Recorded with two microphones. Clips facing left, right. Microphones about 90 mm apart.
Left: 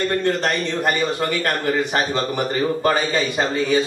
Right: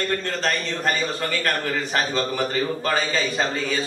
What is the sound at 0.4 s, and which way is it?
A man's voice, 15° left (ahead or behind).